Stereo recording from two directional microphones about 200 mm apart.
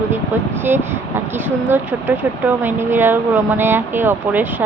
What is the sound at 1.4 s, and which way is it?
Speech, 10° right (ahead or behind).